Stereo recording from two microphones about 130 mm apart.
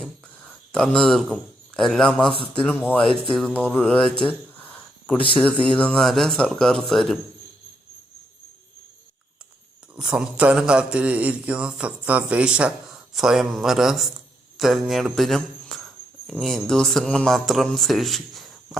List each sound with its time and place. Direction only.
0.0 s a sound: 5° left (ahead or behind)
2.3 s speech: 45° left (ahead or behind)
2.6 s speech: 10° left (ahead or behind)
9.9 s speech: 10° right (ahead or behind)
14.6 s a sound: centre (ahead or behind)
16.3 s speech: centre (ahead or behind)